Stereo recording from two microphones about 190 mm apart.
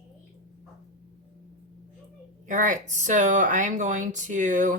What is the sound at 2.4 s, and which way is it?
Speech, 40° right (ahead or behind).